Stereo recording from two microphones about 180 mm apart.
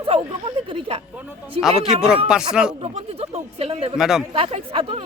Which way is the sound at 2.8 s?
35° right (ahead or behind).